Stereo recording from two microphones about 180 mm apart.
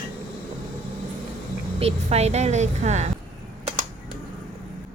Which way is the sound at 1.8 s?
35° right (ahead or behind).